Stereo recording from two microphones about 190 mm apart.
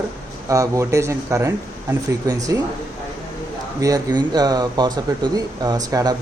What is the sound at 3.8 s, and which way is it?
Speech, 20° right (ahead or behind).